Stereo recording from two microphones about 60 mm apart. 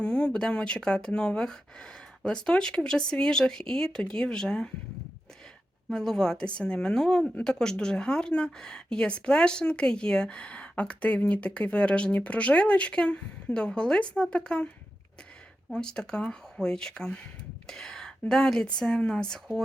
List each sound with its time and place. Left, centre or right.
0.0 s speech: centre
5.9 s speech: centre
15.7 s speech: centre